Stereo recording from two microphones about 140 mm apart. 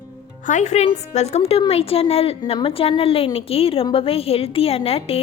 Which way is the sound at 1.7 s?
45° left (ahead or behind).